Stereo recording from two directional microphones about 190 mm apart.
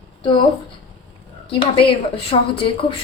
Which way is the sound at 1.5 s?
30° left (ahead or behind).